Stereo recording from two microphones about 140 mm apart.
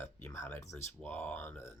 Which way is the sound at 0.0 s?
15° left (ahead or behind).